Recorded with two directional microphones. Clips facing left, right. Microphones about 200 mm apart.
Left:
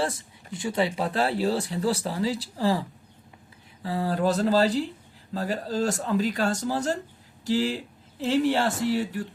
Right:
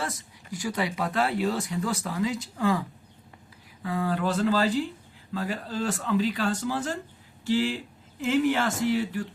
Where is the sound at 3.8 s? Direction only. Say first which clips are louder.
Left 2 dB; 35° left (ahead or behind).